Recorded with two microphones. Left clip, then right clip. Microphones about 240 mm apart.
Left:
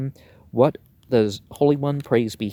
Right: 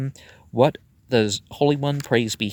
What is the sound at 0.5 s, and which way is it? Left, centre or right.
Speech, right.